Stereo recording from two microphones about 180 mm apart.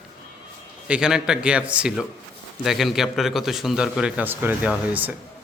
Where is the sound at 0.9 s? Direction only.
5° right (ahead or behind).